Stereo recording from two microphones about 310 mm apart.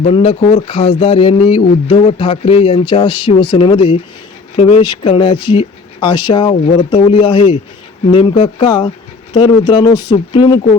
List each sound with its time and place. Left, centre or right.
0.0 s speech: centre